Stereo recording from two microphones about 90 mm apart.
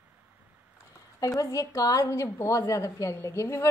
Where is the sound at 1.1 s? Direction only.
40° left (ahead or behind).